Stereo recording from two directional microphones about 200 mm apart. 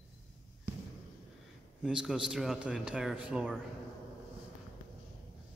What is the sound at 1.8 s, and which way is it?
Speech, 5° right (ahead or behind).